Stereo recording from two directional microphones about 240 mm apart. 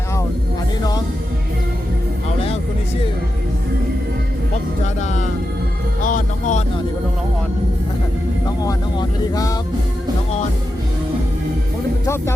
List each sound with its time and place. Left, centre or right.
4.9 s speech: left
6.1 s music: left
8.6 s vehicle: centre
12.0 s music: centre